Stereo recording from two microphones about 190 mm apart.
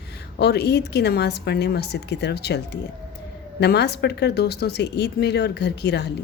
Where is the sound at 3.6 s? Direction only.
60° left (ahead or behind).